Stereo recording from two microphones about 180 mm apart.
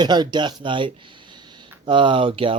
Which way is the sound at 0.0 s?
25° right (ahead or behind).